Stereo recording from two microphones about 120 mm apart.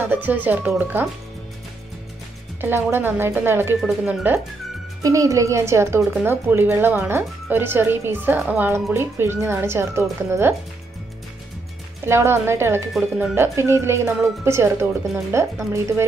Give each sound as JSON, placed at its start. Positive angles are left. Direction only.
{"t": 0.1, "sound": "speech", "side_deg": -15}
{"t": 2.6, "sound": "a woman's voice", "side_deg": -20}
{"t": 3.8, "sound": "speech", "side_deg": -10}
{"t": 5.0, "sound": "a woman's voice", "side_deg": -25}
{"t": 12.1, "sound": "a woman's voice", "side_deg": -20}